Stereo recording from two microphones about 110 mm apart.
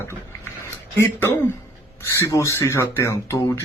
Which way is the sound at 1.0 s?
20° left (ahead or behind).